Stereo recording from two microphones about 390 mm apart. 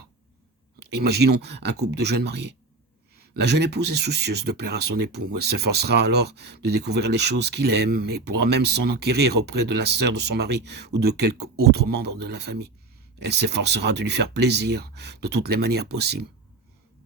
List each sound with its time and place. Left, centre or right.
0.8 s speech: right